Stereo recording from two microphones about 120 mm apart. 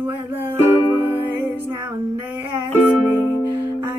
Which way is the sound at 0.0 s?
15° right (ahead or behind).